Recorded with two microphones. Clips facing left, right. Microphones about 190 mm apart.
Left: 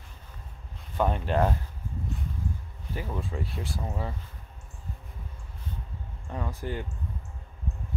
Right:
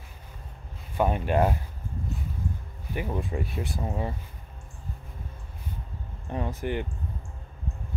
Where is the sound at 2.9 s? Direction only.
15° right (ahead or behind).